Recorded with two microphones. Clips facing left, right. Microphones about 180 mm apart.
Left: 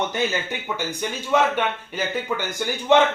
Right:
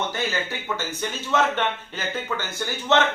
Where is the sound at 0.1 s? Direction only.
15° left (ahead or behind).